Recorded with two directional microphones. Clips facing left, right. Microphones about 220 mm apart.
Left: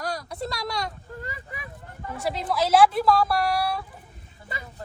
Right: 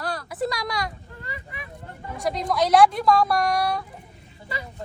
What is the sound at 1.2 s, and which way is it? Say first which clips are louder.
Vehicle: right 1 dB; 45° left (ahead or behind).